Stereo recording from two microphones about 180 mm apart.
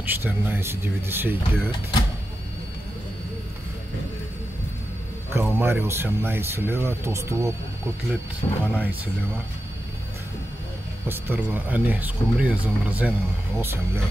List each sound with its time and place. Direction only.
0.0 s speech: 10° right (ahead or behind)
5.3 s speech: 10° right (ahead or behind)
8.4 s speech: 30° left (ahead or behind)
8.7 s speech: 10° right (ahead or behind)
11.1 s speech: 10° right (ahead or behind)